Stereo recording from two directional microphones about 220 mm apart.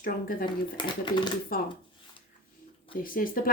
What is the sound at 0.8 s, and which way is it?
Speech, 20° left (ahead or behind).